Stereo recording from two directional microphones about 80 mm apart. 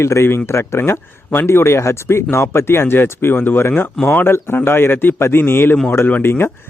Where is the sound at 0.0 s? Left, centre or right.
Left.